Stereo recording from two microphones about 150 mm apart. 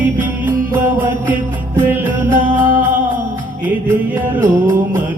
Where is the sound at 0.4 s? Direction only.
15° right (ahead or behind).